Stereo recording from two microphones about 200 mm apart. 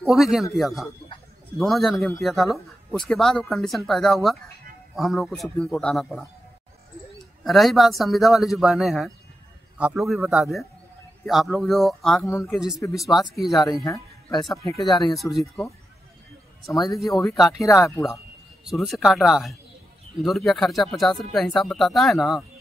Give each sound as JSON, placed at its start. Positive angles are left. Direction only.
{"t": 0.0, "sound": "speech", "side_deg": 0}
{"t": 0.8, "sound": "a sound", "side_deg": 25}
{"t": 1.6, "sound": "speech", "side_deg": 0}
{"t": 13.5, "sound": "speech", "side_deg": 15}
{"t": 14.8, "sound": "speech", "side_deg": 0}
{"t": 16.7, "sound": "speech", "side_deg": 20}
{"t": 18.6, "sound": "speech", "side_deg": 0}